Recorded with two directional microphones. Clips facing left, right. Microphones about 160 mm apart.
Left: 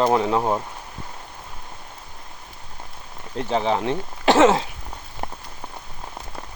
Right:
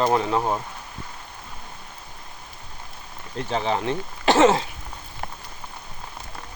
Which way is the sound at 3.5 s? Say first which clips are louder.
Left 3 dB; 15° left (ahead or behind).